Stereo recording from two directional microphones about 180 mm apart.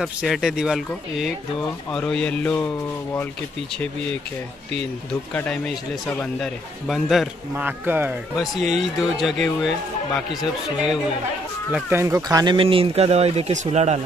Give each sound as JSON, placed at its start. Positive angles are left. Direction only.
{"t": 0.0, "sound": "a man's voice", "side_deg": 0}
{"t": 5.3, "sound": "a man's voice", "side_deg": 10}
{"t": 8.4, "sound": "a man's voice", "side_deg": 0}
{"t": 11.7, "sound": "speech", "side_deg": -15}